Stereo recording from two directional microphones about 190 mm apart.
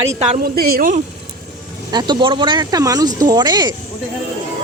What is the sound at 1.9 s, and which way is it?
A woman's voice, 20° right (ahead or behind).